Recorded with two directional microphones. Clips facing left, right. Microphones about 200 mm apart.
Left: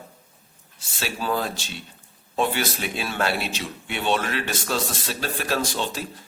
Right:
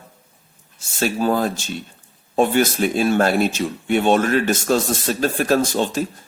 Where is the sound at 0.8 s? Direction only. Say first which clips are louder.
Right 10 dB; 45° right (ahead or behind).